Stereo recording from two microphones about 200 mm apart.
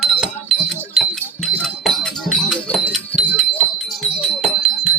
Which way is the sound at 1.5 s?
Centre (ahead or behind).